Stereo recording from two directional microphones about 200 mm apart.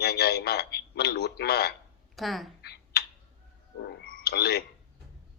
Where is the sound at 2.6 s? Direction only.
55° left (ahead or behind).